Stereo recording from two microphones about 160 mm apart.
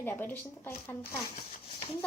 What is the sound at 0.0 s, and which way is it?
Speech, 10° left (ahead or behind).